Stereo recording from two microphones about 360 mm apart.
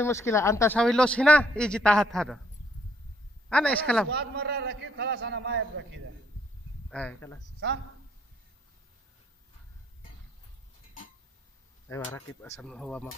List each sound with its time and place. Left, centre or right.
0.0 s a man's voice: centre
3.4 s a man's voice: centre
4.1 s a man's voice: right
6.9 s a man's voice: centre
11.9 s a man's voice: centre